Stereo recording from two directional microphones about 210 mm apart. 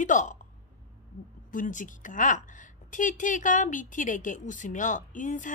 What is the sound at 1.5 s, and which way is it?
A woman's voice, 40° left (ahead or behind).